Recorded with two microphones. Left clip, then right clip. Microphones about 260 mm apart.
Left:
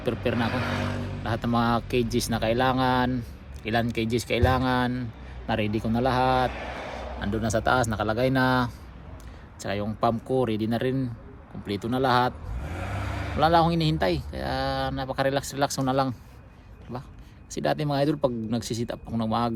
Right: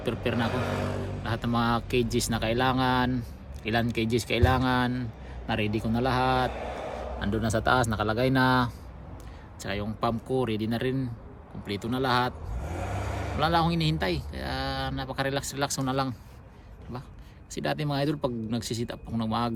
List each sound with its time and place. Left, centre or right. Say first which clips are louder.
0.0 s speech: left 2 dB; centre
0.6 s a sound: left 1 dB; right
1.2 s speech: left 3 dB; centre
6.5 s vehicle: even; right
7.2 s speech: left 2 dB; centre
9.6 s speech: left 4 dB; centre
12.5 s vehicle: even; right
13.4 s speech: left 5 dB; centre